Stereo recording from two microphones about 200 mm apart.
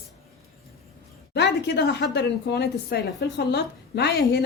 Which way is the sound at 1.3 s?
60° left (ahead or behind).